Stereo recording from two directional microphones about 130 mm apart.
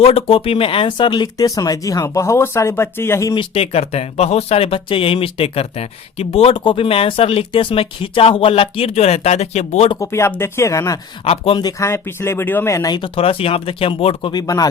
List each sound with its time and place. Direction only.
0.0 s speech: 50° left (ahead or behind); by 3.3 s 20° left (ahead or behind)
3.3 s speech: 45° left (ahead or behind)
10.0 s speech: 20° left (ahead or behind)
11.3 s speech: 50° left (ahead or behind)
11.6 s speech: 20° left (ahead or behind)
13.0 s speech: 50° left (ahead or behind); by 14.7 s 30° left (ahead or behind)